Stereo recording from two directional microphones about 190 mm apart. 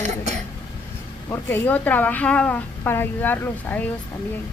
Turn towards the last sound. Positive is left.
turn(degrees=10)  # may be behind; listen again after turning